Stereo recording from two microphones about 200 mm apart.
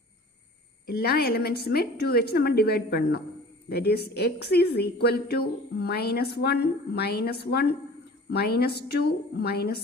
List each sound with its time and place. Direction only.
0.9 s a woman's voice: 50° left (ahead or behind)